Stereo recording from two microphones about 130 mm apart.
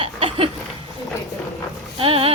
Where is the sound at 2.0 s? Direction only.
45° right (ahead or behind).